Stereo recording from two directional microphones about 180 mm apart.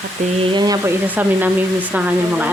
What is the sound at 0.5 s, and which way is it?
Speech, 20° right (ahead or behind).